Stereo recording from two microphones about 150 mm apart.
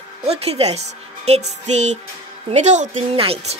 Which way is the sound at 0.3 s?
45° right (ahead or behind).